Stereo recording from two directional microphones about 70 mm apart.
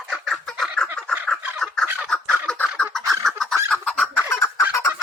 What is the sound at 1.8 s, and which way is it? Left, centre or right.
Chicken, right.